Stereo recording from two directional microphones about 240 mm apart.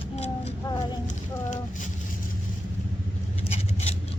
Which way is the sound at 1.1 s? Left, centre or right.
Left.